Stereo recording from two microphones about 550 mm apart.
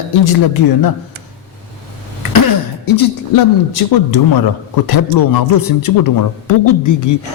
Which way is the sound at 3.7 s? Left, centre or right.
Left.